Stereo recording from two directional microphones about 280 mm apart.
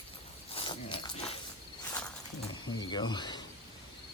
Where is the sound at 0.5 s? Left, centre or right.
Centre.